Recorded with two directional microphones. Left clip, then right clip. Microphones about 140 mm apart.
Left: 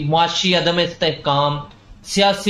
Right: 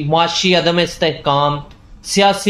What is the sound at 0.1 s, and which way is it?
Speech, 40° right (ahead or behind).